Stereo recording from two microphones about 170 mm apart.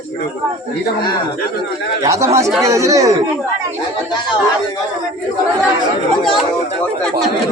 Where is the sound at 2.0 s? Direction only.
20° right (ahead or behind).